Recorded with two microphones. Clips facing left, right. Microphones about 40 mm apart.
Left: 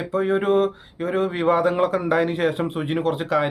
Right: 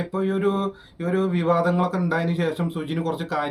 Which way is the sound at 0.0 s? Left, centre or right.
Left.